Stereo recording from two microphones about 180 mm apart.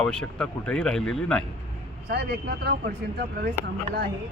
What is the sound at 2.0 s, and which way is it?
Speech, 65° right (ahead or behind).